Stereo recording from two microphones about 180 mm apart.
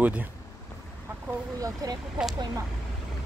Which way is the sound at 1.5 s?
20° right (ahead or behind).